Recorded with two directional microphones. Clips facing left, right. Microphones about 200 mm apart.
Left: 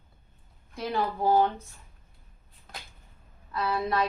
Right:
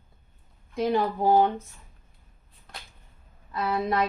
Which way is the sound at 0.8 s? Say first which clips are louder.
Right 5 dB; 20° right (ahead or behind).